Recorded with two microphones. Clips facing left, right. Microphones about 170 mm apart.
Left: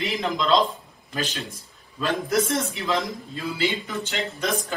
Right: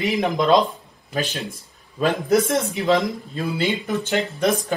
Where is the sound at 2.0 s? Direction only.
55° right (ahead or behind).